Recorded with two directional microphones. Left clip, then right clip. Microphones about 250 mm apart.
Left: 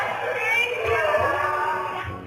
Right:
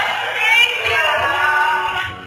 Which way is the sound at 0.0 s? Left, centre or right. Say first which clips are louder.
Right 7 dB; centre.